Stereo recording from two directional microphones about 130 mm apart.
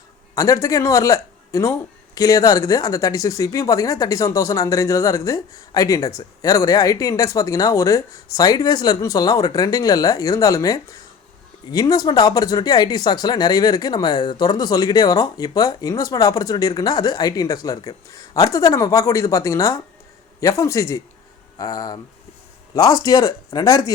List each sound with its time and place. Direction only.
0.3 s speech: 25° left (ahead or behind)